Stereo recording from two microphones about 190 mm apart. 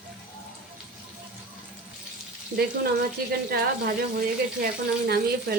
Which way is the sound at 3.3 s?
55° right (ahead or behind).